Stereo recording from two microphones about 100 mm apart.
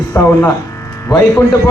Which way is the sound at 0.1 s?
30° left (ahead or behind).